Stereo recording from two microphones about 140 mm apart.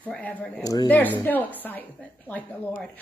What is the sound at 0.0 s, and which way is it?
Speech, 10° left (ahead or behind).